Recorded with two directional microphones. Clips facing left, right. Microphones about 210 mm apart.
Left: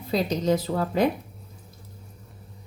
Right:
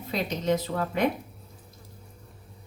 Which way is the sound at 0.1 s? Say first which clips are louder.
Left 4 dB; 35° left (ahead or behind).